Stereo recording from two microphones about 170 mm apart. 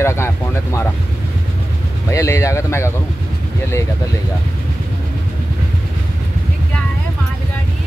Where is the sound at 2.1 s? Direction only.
15° left (ahead or behind).